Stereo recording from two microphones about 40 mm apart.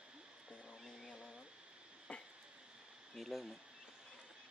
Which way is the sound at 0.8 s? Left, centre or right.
Centre.